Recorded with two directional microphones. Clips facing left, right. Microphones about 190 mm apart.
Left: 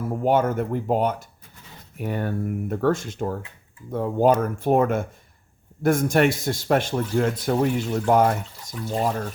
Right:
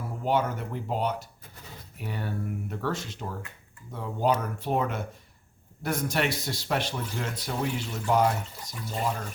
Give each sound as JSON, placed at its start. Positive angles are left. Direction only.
{"t": 0.1, "sound": "speech", "side_deg": 50}